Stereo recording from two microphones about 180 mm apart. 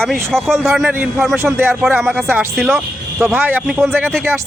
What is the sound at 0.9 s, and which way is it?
Speech, 10° right (ahead or behind).